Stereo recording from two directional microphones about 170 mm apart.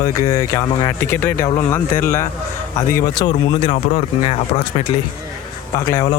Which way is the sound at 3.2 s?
30° left (ahead or behind).